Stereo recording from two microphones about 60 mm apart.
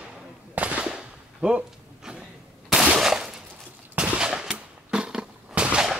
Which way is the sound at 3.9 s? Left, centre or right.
Centre.